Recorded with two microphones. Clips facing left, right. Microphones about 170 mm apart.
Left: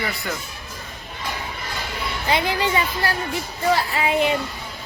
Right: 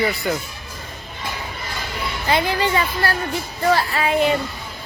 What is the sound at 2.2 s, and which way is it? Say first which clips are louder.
A woman's voice: right 2 dB; 15° left (ahead or behind).